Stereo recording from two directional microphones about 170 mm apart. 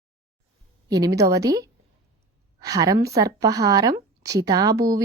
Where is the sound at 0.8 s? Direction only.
20° right (ahead or behind).